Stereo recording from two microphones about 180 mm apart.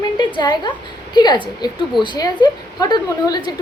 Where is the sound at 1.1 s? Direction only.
25° left (ahead or behind).